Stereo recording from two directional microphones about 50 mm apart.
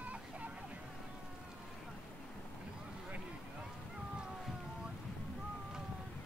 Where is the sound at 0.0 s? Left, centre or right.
Right.